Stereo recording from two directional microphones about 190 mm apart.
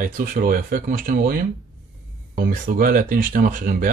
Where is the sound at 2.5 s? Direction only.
50° right (ahead or behind).